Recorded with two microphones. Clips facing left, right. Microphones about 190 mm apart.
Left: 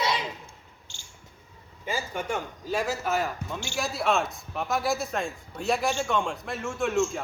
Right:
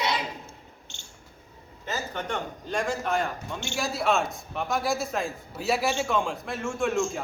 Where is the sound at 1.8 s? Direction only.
10° left (ahead or behind).